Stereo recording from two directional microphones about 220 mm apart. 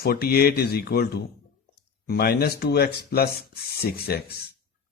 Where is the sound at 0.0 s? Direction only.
45° left (ahead or behind).